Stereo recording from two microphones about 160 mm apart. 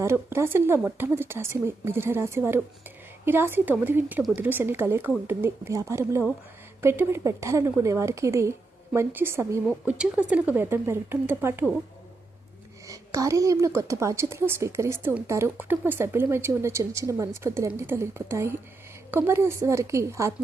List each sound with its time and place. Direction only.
0.0 s a woman's voice: 15° right (ahead or behind)
12.9 s a woman's voice: 20° right (ahead or behind)